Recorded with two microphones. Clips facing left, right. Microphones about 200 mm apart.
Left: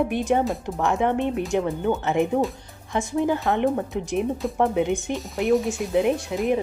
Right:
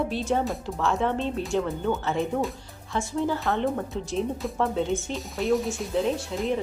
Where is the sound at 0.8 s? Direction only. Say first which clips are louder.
Left 3 dB; 15° left (ahead or behind).